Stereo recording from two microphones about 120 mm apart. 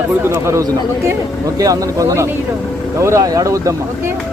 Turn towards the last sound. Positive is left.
turn(degrees=-30)  # may be behind; listen again after turning